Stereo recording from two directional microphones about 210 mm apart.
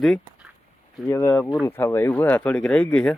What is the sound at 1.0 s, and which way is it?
Speech, 15° left (ahead or behind).